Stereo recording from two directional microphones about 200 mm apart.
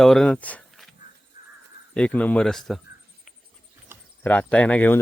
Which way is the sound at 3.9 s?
10° right (ahead or behind).